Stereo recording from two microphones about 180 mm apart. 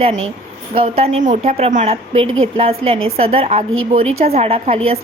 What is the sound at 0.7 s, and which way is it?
A woman's voice, 35° right (ahead or behind).